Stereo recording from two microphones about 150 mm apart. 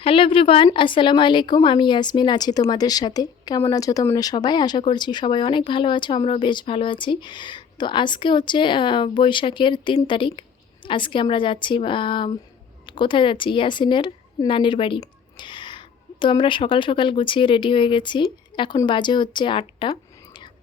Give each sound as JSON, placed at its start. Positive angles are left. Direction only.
{"t": 0.0, "sound": "a woman's voice", "side_deg": 35}